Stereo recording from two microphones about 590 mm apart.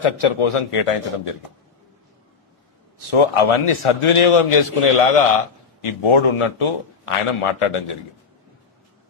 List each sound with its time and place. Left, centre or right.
0.0 s a man's voice: left
3.1 s a man's voice: left